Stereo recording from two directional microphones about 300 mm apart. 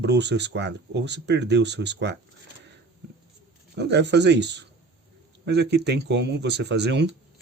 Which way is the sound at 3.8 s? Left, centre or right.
Right.